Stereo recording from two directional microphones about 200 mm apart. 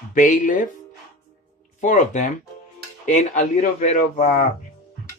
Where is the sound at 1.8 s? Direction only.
40° left (ahead or behind).